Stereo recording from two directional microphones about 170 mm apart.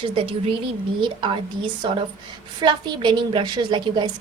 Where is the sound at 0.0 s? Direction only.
35° right (ahead or behind).